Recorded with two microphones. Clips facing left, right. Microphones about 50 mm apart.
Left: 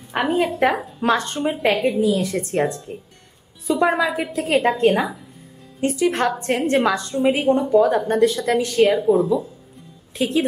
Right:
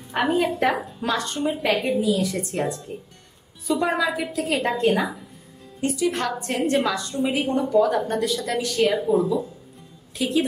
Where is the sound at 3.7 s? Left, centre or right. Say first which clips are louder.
Left 4 dB; centre.